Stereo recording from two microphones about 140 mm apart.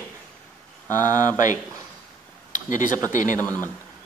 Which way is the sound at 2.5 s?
65° left (ahead or behind).